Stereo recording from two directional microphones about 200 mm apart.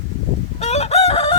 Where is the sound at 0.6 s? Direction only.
35° left (ahead or behind).